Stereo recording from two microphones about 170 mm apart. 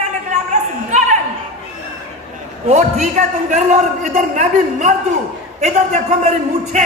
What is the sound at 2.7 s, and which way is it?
A man's voice, 45° right (ahead or behind).